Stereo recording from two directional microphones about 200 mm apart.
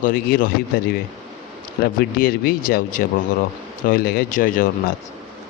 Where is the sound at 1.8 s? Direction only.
50° left (ahead or behind).